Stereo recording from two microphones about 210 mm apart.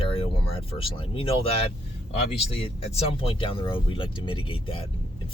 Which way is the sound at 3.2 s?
25° left (ahead or behind).